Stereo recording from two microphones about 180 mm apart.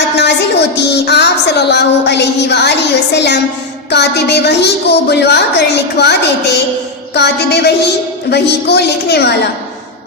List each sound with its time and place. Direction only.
0.2 s a woman's voice: 70° left (ahead or behind)